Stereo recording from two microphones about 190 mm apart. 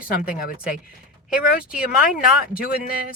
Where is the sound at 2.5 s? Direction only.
50° left (ahead or behind).